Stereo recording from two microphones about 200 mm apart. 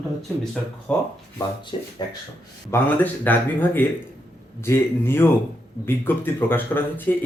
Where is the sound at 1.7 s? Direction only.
25° left (ahead or behind).